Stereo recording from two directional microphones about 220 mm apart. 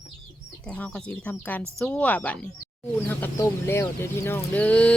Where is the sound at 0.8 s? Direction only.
5° left (ahead or behind).